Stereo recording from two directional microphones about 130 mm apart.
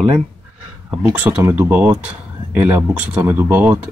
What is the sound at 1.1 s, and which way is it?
Speech, 10° right (ahead or behind).